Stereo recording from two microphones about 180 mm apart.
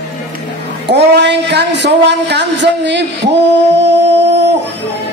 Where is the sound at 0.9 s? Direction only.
70° right (ahead or behind).